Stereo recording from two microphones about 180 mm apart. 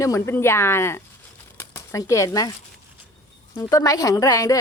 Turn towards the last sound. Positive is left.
turn(degrees=20)  # may be behind; listen again after turning